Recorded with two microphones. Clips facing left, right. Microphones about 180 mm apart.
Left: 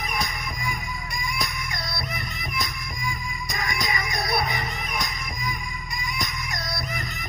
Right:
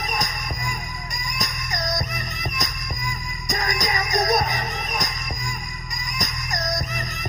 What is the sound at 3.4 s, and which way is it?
Music, 45° right (ahead or behind).